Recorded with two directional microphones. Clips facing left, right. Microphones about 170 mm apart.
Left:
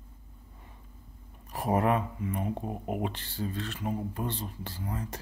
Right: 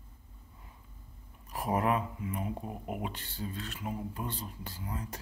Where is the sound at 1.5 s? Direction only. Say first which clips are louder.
Left 3 dB; 35° left (ahead or behind).